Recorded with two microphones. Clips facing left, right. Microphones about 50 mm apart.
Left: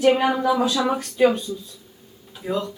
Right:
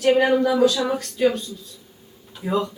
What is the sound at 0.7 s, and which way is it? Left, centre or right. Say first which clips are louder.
Speech: left 1 dB; left.